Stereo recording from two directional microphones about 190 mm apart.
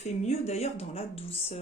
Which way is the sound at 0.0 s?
35° left (ahead or behind).